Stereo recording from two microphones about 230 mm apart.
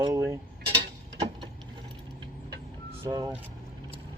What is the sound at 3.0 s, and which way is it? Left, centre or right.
Speech, centre.